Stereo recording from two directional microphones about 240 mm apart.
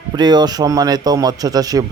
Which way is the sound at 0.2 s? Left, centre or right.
Centre.